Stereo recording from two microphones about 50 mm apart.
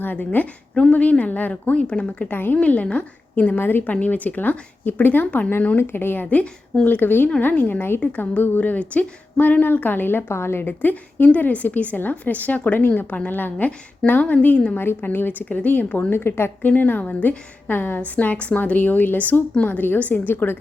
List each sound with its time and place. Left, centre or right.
0.0 s a woman's voice: left
0.8 s a woman's voice: left
1.7 s a woman's voice: left
2.3 s a woman's voice: left
2.6 s a woman's voice: left
4.0 s a woman's voice: left
5.7 s a woman's voice: left
10.6 s a woman's voice: left
14.8 s a woman's voice: left
16.1 s speech: left
16.6 s a woman's voice: left